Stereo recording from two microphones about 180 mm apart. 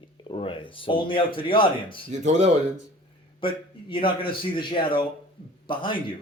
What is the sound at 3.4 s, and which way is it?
Speech, 30° left (ahead or behind).